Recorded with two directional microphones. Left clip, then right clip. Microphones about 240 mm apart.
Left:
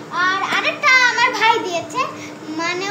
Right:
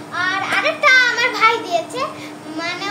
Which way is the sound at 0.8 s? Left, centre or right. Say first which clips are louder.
Even; centre.